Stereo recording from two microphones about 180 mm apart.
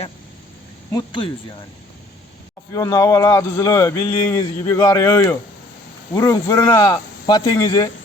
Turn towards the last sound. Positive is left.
turn(degrees=20)  # may be behind; listen again after turning